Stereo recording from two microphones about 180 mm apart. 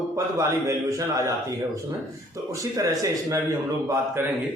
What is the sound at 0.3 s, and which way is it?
A man's voice, 15° right (ahead or behind).